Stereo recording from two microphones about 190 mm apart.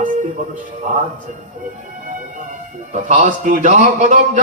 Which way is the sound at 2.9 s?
40° right (ahead or behind).